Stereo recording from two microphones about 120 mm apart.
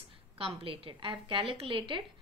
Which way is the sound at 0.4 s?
50° right (ahead or behind).